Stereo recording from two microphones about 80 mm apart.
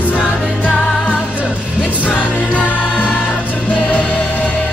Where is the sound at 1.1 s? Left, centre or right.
Centre.